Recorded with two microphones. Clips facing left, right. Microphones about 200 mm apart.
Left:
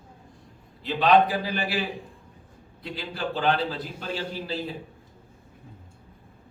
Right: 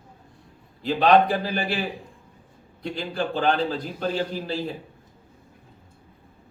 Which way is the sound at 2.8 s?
45° right (ahead or behind).